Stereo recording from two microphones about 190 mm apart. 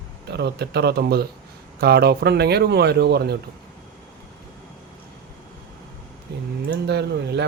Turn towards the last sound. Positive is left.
turn(degrees=-60)  # may be behind; listen again after turning